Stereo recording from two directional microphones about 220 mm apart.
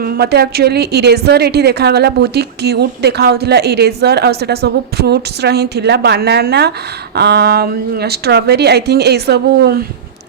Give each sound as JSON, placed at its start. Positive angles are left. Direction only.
{"t": 0.0, "sound": "a woman's voice", "side_deg": -45}